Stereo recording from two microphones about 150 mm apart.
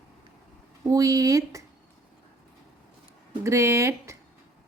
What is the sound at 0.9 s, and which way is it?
Speech, 25° right (ahead or behind).